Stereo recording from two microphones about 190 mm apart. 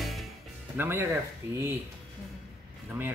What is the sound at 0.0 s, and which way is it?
Music, centre (ahead or behind).